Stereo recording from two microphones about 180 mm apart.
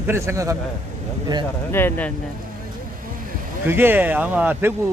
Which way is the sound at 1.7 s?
10° left (ahead or behind).